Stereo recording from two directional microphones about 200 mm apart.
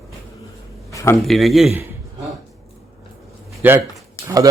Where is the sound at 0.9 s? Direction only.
15° left (ahead or behind).